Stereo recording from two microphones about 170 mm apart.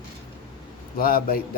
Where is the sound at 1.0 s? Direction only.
60° left (ahead or behind).